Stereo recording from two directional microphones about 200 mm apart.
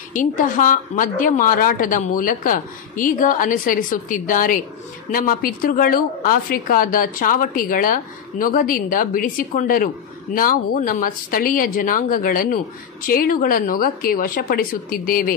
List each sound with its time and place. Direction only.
0.1 s speech: 40° left (ahead or behind)